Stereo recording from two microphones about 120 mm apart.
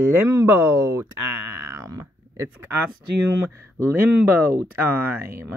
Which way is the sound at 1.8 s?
25° right (ahead or behind).